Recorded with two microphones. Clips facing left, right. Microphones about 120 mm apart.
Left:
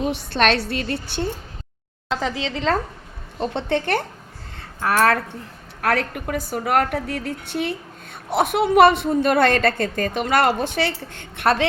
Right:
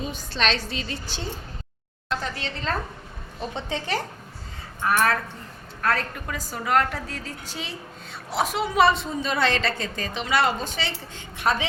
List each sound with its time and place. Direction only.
0.0 s a woman's voice: 60° left (ahead or behind)
2.2 s speech: 90° left
3.4 s a woman's voice: 65° left (ahead or behind)
4.8 s a woman's voice: 85° left; by 10.5 s 50° left (ahead or behind)
10.5 s a woman's voice: 65° left (ahead or behind)